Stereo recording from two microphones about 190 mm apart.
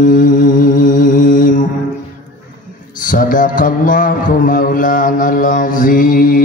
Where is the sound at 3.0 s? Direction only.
45° left (ahead or behind).